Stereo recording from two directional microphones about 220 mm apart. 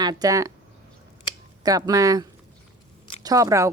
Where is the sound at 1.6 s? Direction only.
15° right (ahead or behind).